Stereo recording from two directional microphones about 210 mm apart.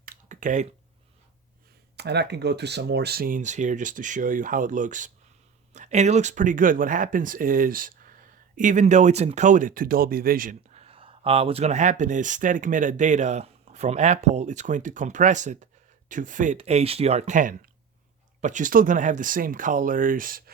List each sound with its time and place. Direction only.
0.0 s a sound: 40° right (ahead or behind)
2.0 s speech: 50° right (ahead or behind)
10.8 s speech: 25° right (ahead or behind)